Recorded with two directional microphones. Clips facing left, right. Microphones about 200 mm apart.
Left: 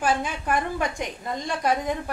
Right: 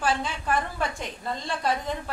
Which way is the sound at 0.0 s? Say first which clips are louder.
Left 2 dB; 15° left (ahead or behind).